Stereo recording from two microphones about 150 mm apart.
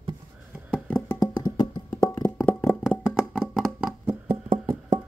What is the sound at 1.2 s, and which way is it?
Music, 30° left (ahead or behind).